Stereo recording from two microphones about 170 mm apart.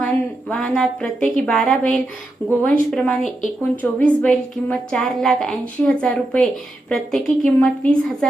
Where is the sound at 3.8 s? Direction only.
10° left (ahead or behind).